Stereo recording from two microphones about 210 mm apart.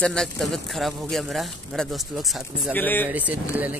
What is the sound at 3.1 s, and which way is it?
Speech, 5° right (ahead or behind).